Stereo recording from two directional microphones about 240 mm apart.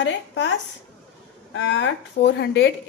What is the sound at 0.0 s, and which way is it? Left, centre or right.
Speech, left.